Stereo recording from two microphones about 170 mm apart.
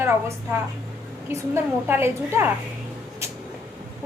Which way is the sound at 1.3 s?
15° right (ahead or behind).